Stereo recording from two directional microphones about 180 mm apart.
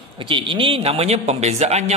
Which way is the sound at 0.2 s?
30° right (ahead or behind).